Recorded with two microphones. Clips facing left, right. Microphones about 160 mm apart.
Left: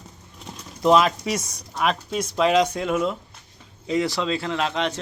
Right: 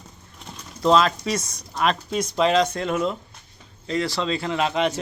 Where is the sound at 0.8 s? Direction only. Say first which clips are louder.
Left 1 dB; 15° left (ahead or behind).